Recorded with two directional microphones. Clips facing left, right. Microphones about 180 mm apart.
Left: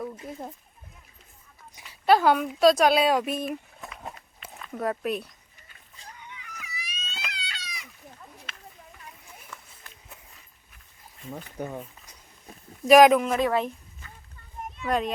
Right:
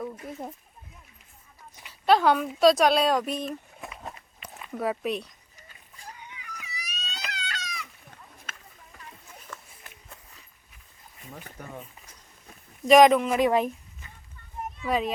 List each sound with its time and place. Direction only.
0.0 s speech: centre (ahead or behind)
1.9 s speech: 5° left (ahead or behind)
3.8 s walk: centre (ahead or behind)
4.7 s speech: centre (ahead or behind)
6.7 s cat: 40° right (ahead or behind)
7.3 s a sound: 45° right (ahead or behind)
12.8 s speech: 5° left (ahead or behind)
13.3 s a sound: 15° right (ahead or behind)
14.8 s speech: 5° right (ahead or behind)